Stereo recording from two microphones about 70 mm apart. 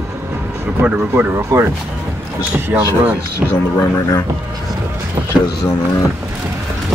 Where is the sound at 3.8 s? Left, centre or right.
Left.